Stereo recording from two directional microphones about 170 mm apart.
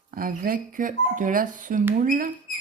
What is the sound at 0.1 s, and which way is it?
Speech, 55° right (ahead or behind).